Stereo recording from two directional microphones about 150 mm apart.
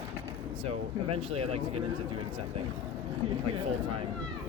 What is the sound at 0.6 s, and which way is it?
Speech, 40° right (ahead or behind).